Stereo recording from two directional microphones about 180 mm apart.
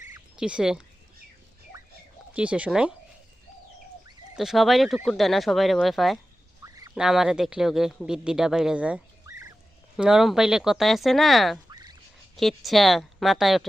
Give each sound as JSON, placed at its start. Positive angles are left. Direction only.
{"t": 0.0, "sound": "a sound", "side_deg": -5}
{"t": 2.3, "sound": "speech", "side_deg": -5}
{"t": 4.4, "sound": "speech", "side_deg": 0}
{"t": 9.2, "sound": "fowl", "side_deg": -15}
{"t": 10.0, "sound": "speech", "side_deg": 0}
{"t": 11.7, "sound": "a sound", "side_deg": -20}
{"t": 12.4, "sound": "speech", "side_deg": 0}